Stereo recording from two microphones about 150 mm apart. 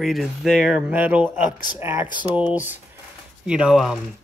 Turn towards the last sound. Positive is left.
turn(degrees=-5)  # may be behind; listen again after turning